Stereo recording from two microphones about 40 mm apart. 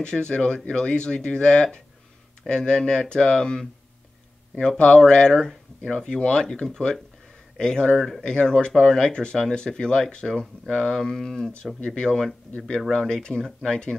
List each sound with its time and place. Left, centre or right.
0.0 s speech: left
4.6 s speech: left
8.7 s speech: centre
11.1 s speech: centre
11.8 s speech: left
12.1 s speech: centre
13.1 s speech: left